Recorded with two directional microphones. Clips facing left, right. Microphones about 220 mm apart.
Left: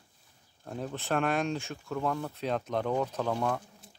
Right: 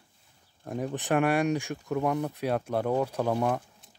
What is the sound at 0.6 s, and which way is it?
Speech, 15° right (ahead or behind).